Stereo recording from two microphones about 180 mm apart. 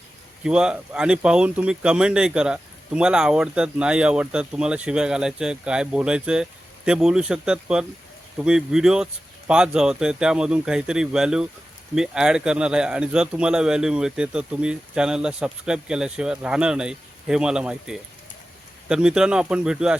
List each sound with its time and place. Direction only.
0.4 s speech: 5° right (ahead or behind)